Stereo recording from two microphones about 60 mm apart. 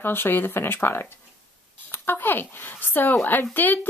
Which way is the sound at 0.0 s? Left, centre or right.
Left.